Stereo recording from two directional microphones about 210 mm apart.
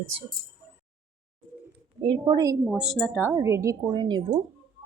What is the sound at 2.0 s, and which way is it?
Speech, 20° right (ahead or behind).